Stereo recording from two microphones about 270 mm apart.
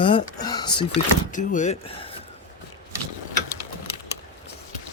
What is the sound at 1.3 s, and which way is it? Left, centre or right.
Speech, left.